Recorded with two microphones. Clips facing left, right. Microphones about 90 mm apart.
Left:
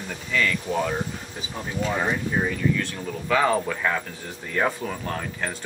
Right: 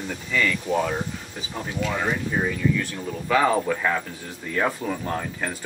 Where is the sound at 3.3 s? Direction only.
5° right (ahead or behind).